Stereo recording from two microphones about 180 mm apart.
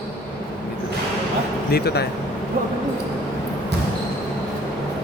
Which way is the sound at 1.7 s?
60° left (ahead or behind).